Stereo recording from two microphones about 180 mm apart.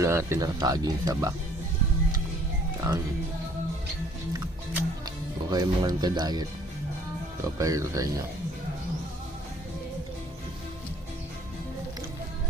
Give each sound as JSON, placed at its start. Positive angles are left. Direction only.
{"t": 0.0, "sound": "speech", "side_deg": -15}
{"t": 4.4, "sound": "music", "side_deg": -20}
{"t": 7.6, "sound": "speech", "side_deg": -20}